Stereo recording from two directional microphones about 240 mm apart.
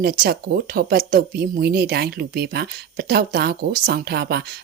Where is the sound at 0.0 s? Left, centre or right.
Right.